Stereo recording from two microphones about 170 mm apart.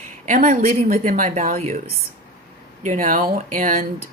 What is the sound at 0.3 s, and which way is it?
A woman's voice, 50° right (ahead or behind).